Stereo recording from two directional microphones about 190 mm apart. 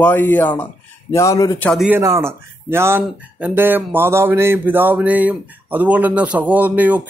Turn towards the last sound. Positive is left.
turn(degrees=-10)  # may be behind; listen again after turning